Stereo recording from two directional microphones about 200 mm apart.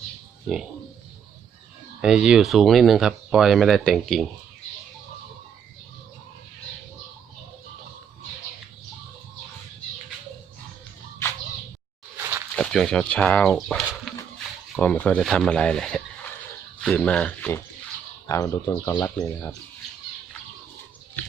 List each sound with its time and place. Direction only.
2.0 s speech: 5° right (ahead or behind)
12.5 s speech: centre (ahead or behind)
18.3 s speech: 15° left (ahead or behind)